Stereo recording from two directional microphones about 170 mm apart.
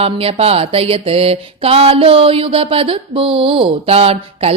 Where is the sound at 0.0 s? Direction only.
35° right (ahead or behind).